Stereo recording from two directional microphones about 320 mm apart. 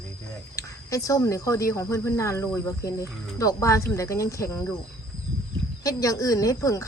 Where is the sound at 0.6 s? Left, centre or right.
Centre.